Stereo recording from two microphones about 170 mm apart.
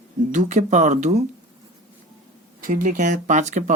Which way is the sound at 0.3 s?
45° right (ahead or behind).